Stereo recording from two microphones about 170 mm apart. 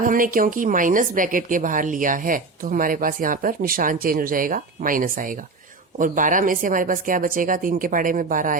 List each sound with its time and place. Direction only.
0.0 s a woman's voice: 55° right (ahead or behind)